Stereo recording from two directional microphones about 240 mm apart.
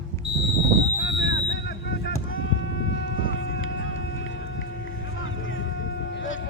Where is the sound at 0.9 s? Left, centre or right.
Left.